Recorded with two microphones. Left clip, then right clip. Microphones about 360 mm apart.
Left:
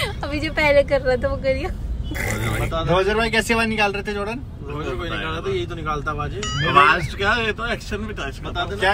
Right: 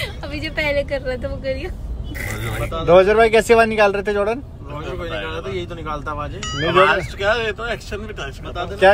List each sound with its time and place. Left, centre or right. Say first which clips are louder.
0.0 s a woman's voice: left 2 dB; centre
2.6 s a man's voice: right 2 dB; centre
3.0 s a man's voice: right 7 dB; right
5.6 s a man's voice: left 1 dB; centre
6.4 s speech: even; centre